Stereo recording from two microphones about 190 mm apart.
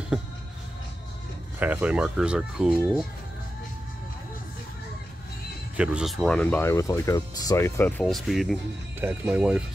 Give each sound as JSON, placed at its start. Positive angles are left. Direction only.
{"t": 1.6, "sound": "speech", "side_deg": -10}
{"t": 5.8, "sound": "speech", "side_deg": -5}